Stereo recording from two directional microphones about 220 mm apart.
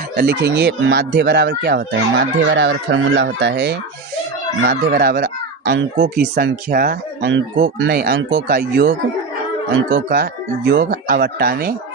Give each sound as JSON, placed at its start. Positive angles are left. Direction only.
{"t": 0.2, "sound": "speech", "side_deg": -50}
{"t": 7.3, "sound": "speech", "side_deg": -55}